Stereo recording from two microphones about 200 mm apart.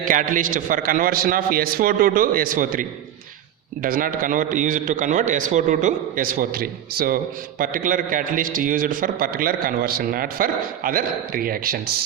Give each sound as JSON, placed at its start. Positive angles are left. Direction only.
{"t": 0.0, "sound": "a man's voice", "side_deg": -40}
{"t": 3.8, "sound": "a man's voice", "side_deg": -45}